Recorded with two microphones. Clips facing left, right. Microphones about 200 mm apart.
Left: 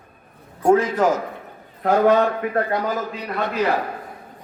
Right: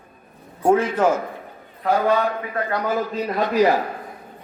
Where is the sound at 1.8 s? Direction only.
50° left (ahead or behind).